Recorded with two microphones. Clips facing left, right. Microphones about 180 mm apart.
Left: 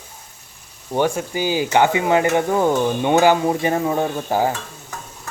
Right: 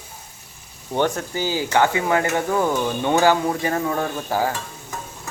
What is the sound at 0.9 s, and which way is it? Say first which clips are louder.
Stir: left 2 dB; 10° left (ahead or behind).